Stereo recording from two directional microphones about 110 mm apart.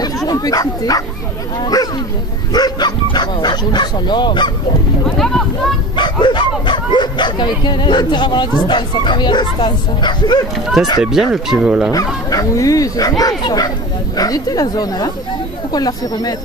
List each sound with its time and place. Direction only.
0.0 s bow-wow: 35° left (ahead or behind)
1.6 s speech: 35° left (ahead or behind)
5.0 s speech: 5° left (ahead or behind)
5.9 s speech: 45° left (ahead or behind)
11.0 s speech: 5° right (ahead or behind)
12.3 s speech: 30° left (ahead or behind)